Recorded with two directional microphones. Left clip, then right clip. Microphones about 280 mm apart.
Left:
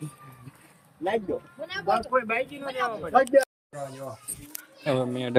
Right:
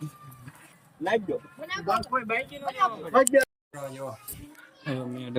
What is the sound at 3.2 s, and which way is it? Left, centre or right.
Speech, centre.